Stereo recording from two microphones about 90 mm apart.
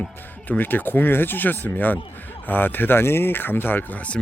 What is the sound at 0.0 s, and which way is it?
Speech, 20° left (ahead or behind).